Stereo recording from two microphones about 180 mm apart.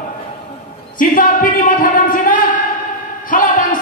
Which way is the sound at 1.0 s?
50° left (ahead or behind).